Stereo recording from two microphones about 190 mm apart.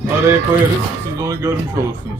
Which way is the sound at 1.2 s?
15° right (ahead or behind).